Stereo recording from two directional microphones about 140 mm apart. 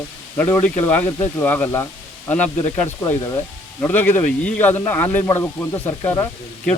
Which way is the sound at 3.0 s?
25° left (ahead or behind).